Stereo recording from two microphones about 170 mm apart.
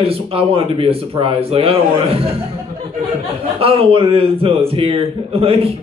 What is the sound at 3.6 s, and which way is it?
Speech, 35° right (ahead or behind).